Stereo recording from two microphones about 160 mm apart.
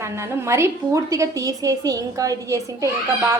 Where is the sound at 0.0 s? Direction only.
15° right (ahead or behind).